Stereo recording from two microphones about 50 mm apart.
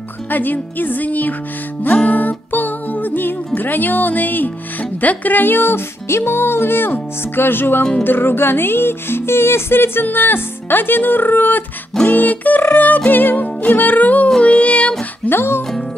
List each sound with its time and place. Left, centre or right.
0.3 s music: left
15.2 s music: left